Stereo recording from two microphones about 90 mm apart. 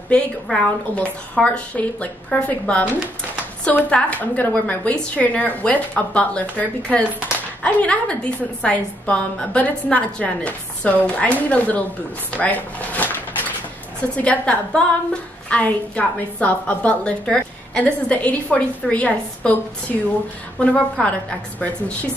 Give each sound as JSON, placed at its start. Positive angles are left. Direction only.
{"t": 0.1, "sound": "a woman's voice", "side_deg": 10}
{"t": 14.2, "sound": "a woman's voice", "side_deg": 15}